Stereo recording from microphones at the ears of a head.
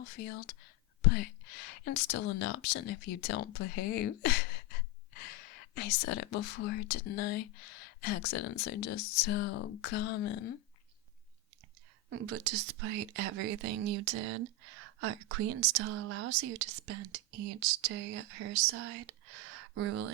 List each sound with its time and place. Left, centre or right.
0.0 s speech: left
12.0 s speech: right